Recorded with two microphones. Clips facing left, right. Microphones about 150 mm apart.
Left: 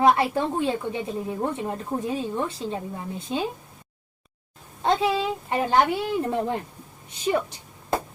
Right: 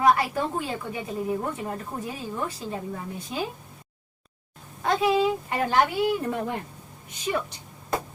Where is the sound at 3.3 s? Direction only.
25° left (ahead or behind).